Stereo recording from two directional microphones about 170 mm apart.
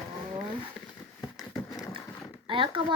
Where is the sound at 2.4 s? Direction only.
30° right (ahead or behind).